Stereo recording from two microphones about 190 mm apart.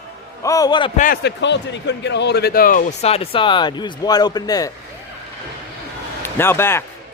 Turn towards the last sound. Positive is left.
turn(degrees=10)  # may be behind; listen again after turning